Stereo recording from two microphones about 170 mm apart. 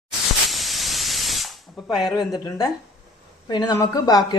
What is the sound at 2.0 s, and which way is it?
Speech, centre (ahead or behind).